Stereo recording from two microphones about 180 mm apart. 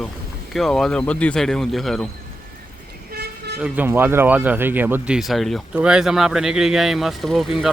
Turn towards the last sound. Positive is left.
turn(degrees=0)  # may be behind; listen again after turning